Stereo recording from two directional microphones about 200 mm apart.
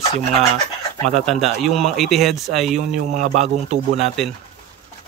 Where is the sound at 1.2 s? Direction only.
Centre (ahead or behind).